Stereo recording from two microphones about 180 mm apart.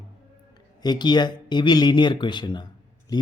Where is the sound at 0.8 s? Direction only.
25° left (ahead or behind).